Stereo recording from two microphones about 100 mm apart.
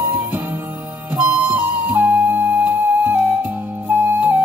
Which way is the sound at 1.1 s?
15° right (ahead or behind).